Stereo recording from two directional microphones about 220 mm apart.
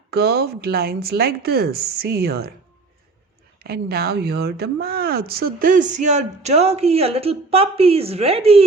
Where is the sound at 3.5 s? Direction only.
45° right (ahead or behind); by 8.6 s 25° right (ahead or behind).